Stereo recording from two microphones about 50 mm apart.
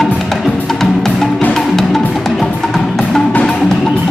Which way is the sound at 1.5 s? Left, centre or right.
Centre.